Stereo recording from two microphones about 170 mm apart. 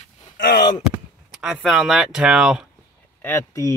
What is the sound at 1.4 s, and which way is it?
Speech, 5° right (ahead or behind).